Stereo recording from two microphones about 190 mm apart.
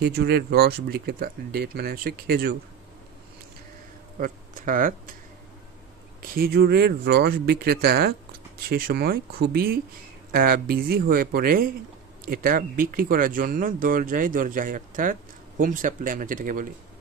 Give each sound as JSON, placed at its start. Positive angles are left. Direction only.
{"t": 0.0, "sound": "speech", "side_deg": -60}
{"t": 4.2, "sound": "speech", "side_deg": -45}
{"t": 6.2, "sound": "speech", "side_deg": -50}